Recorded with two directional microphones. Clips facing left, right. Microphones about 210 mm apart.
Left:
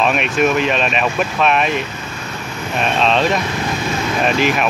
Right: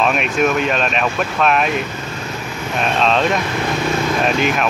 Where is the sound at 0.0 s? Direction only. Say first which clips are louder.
Left 1 dB; centre (ahead or behind).